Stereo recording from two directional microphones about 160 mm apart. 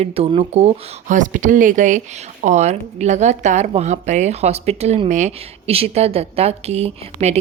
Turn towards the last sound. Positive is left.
turn(degrees=-40)  # may be behind; listen again after turning